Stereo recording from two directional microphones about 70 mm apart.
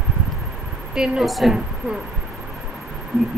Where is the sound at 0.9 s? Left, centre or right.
Centre.